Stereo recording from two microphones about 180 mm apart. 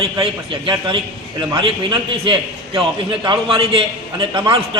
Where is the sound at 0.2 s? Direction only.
25° right (ahead or behind).